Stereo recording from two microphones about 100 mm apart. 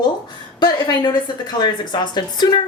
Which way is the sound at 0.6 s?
45° left (ahead or behind).